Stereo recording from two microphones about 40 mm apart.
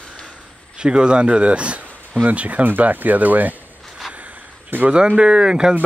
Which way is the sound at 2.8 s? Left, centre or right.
Right.